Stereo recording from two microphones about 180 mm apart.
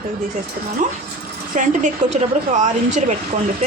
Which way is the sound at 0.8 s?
45° right (ahead or behind).